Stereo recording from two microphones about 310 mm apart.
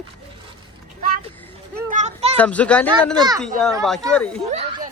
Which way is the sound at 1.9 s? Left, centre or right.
Right.